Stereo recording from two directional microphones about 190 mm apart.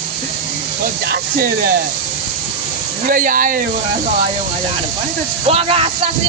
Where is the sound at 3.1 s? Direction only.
45° right (ahead or behind).